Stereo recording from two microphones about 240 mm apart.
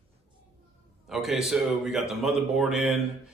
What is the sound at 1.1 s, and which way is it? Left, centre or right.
Speech, centre.